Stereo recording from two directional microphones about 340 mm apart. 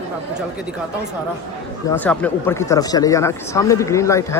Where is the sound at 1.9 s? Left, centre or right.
Centre.